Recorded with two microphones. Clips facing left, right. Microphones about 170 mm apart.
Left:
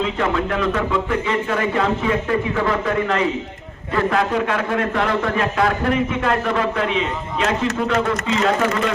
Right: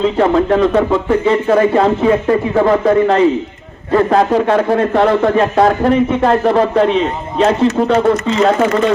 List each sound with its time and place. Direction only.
0.0 s speech: 35° right (ahead or behind)